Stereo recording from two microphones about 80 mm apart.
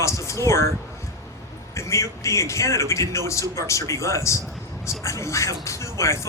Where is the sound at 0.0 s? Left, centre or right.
Left.